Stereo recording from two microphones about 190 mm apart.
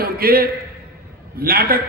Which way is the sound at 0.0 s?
50° right (ahead or behind).